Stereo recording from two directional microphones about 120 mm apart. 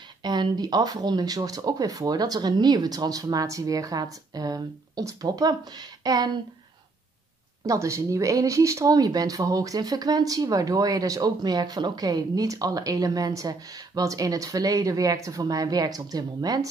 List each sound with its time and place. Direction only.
0.2 s speech: 35° right (ahead or behind)
7.6 s speech: 25° right (ahead or behind)